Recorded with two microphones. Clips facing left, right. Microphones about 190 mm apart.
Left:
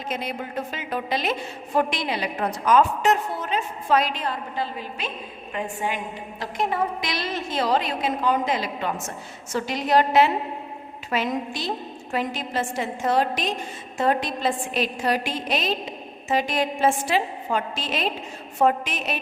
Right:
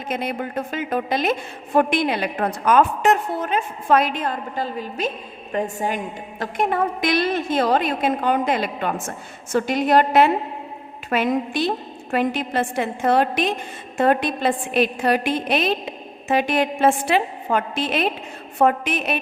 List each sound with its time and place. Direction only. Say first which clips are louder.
0.1 s a woman's voice: right 5 dB; 55° right (ahead or behind)
6.4 s a woman's voice: right 4 dB; 55° right (ahead or behind)